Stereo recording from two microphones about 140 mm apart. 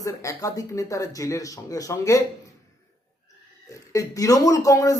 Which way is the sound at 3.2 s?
25° left (ahead or behind).